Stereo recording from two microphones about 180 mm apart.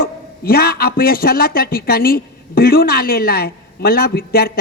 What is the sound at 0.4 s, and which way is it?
A woman's voice, 55° left (ahead or behind).